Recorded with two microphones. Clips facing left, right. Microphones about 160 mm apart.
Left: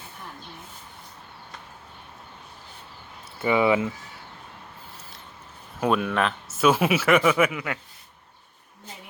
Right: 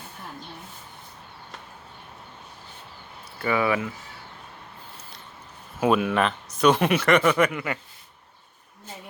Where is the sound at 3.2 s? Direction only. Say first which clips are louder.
Left 3 dB; 20° left (ahead or behind).